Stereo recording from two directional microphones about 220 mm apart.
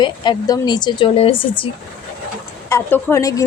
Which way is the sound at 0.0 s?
20° left (ahead or behind).